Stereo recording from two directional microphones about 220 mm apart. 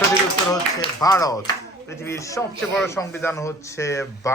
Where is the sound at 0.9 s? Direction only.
15° left (ahead or behind).